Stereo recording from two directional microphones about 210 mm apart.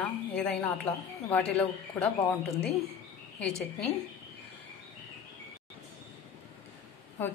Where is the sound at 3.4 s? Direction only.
Centre (ahead or behind).